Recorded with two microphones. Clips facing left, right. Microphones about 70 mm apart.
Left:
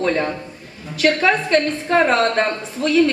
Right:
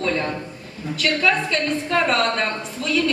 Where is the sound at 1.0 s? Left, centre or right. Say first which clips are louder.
Left 4 dB; left.